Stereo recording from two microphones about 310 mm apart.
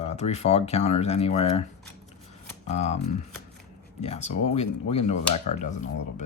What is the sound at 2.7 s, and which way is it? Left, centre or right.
Speech, left.